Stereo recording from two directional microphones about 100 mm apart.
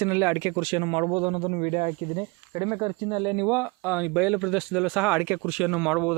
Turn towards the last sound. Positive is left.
turn(degrees=-10)  # may be behind; listen again after turning